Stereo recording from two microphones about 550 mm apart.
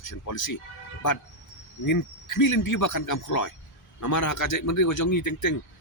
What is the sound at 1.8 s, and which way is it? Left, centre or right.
Speech, left.